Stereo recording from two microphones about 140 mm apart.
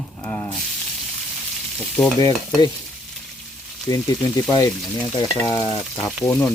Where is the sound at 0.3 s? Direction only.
10° left (ahead or behind).